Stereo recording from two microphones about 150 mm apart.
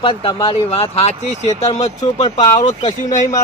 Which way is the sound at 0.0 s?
35° left (ahead or behind).